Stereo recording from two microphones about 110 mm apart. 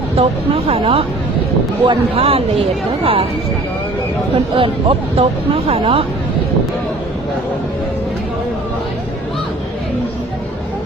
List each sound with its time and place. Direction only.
0.2 s speech: 60° right (ahead or behind)
4.5 s speech: 55° right (ahead or behind)